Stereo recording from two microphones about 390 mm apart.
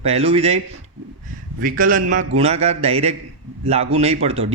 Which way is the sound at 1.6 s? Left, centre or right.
Right.